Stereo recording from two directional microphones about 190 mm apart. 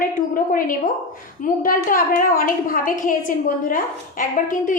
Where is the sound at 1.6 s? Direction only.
45° left (ahead or behind).